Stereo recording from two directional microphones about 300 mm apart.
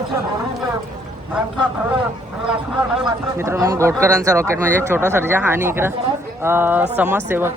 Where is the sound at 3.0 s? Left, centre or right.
Centre.